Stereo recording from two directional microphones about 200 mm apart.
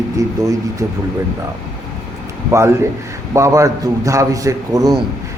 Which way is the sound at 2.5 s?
15° right (ahead or behind).